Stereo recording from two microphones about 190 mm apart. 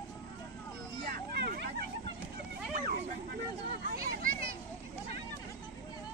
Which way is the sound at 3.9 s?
50° right (ahead or behind).